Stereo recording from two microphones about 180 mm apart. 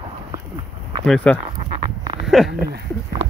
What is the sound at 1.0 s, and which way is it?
Speech, 5° left (ahead or behind).